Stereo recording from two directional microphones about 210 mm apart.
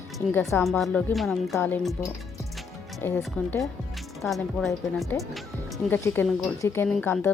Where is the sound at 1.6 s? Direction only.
10° left (ahead or behind).